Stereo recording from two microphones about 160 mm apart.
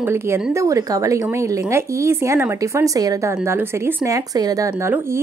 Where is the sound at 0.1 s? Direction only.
15° right (ahead or behind).